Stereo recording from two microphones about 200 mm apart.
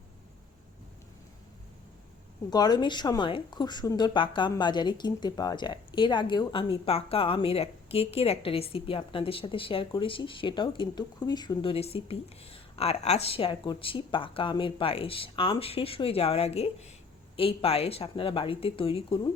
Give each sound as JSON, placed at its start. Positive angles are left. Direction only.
{"t": 2.5, "sound": "a woman's voice", "side_deg": 20}